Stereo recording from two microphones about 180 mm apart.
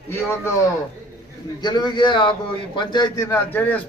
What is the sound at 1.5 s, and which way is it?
A man's voice, 25° left (ahead or behind).